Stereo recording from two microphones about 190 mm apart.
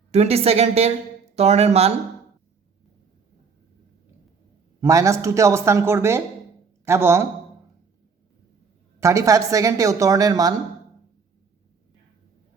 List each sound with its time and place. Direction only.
0.1 s a woman's voice: 35° right (ahead or behind)
4.8 s speech: 15° right (ahead or behind)
9.0 s speech: 15° right (ahead or behind)